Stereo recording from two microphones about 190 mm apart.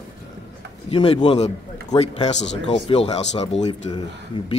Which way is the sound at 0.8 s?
30° left (ahead or behind).